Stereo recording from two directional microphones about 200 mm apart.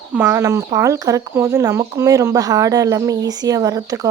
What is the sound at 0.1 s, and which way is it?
Speech, 10° right (ahead or behind).